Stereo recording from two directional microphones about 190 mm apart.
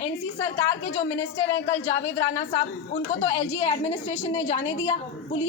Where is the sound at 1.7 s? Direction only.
15° left (ahead or behind).